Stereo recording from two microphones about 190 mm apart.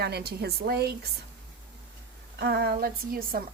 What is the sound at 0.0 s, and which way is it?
Speech, 55° right (ahead or behind).